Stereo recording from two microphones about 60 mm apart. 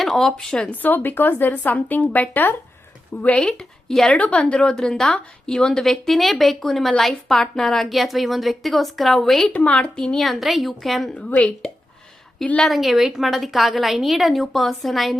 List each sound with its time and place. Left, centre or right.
0.0 s speech: centre
0.7 s a woman's voice: left
3.3 s speech: centre
4.2 s a woman's voice: centre
9.5 s a woman's voice: left
10.2 s a woman's voice: centre
12.6 s a woman's voice: centre